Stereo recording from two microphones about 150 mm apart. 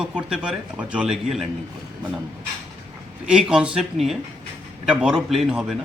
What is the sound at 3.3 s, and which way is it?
Speech, 5° right (ahead or behind).